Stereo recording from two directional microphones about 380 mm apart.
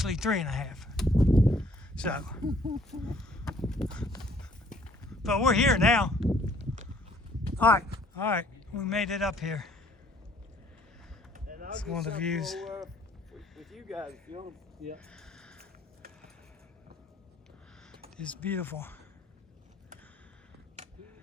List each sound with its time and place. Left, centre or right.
0.0 s speech: centre
1.3 s a sound: centre
2.7 s speech: centre
5.2 s speech: centre
7.6 s speech: centre
11.3 s a sound: right
11.8 s speech: centre
14.3 s speech: centre
14.9 s a sound: centre
18.2 s speech: centre